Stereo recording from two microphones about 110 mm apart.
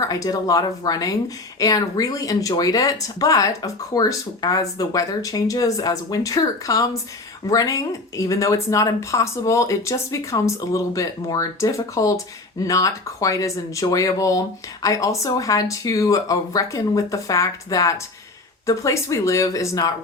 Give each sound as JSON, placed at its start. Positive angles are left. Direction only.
{"t": 0.0, "sound": "speech", "side_deg": 30}